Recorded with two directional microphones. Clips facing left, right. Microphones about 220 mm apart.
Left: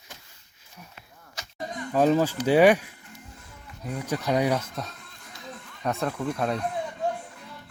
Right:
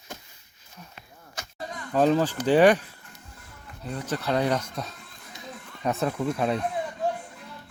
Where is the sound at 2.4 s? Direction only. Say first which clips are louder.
Even; 10° left (ahead or behind).